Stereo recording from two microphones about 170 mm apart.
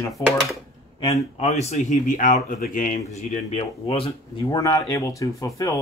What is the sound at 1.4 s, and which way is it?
Speech, 40° left (ahead or behind).